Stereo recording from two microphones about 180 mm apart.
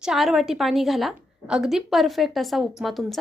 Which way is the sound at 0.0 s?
Centre (ahead or behind).